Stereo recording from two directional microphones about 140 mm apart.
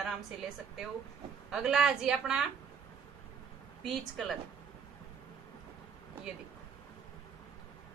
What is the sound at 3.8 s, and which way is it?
Speech, centre (ahead or behind).